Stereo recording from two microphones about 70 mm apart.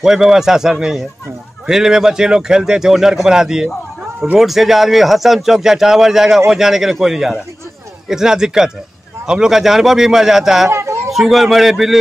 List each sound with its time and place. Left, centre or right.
0.0 s speech: centre
10.7 s a sound: right
11.1 s speech: centre